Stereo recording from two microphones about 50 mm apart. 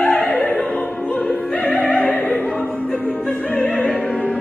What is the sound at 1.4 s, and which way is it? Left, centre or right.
Opera, left.